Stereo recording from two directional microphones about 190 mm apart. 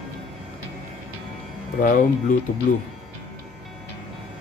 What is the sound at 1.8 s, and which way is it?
Speech, 45° left (ahead or behind).